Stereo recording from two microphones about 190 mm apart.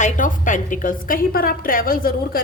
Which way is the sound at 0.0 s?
45° left (ahead or behind).